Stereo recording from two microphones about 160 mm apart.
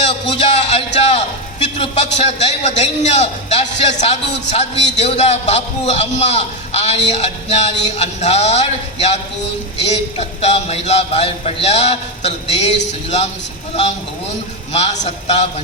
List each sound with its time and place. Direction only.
0.0 s a sound: 40° left (ahead or behind)
2.1 s a man's voice: 45° left (ahead or behind)
14.7 s a man's voice: 40° left (ahead or behind)